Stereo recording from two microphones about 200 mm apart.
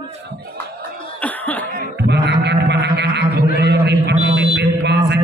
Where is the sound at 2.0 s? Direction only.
60° right (ahead or behind).